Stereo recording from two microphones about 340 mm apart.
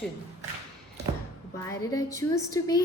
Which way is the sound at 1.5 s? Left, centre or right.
Centre.